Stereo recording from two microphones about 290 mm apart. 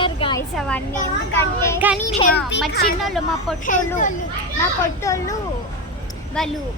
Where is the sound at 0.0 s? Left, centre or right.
Centre.